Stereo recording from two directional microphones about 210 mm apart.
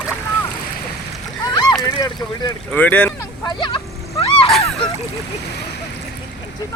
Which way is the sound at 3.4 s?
25° left (ahead or behind).